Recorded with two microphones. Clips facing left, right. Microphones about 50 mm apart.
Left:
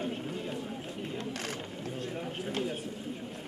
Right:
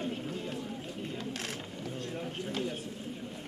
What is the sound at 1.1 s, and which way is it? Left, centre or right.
Mechanisms, left.